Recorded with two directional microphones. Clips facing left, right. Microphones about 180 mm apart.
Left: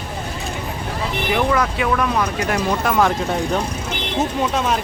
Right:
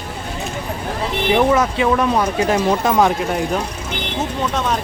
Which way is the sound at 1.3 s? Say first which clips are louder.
Right 4 dB; 20° right (ahead or behind).